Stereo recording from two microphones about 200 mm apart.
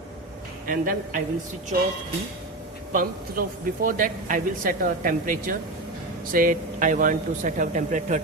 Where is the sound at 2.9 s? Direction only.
45° right (ahead or behind).